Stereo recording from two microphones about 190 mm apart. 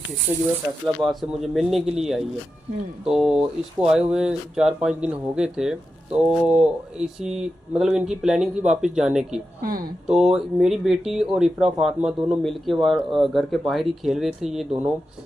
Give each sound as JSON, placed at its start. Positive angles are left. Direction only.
{"t": 0.3, "sound": "speech", "side_deg": 5}
{"t": 9.6, "sound": "speech", "side_deg": -50}
{"t": 10.1, "sound": "speech", "side_deg": -5}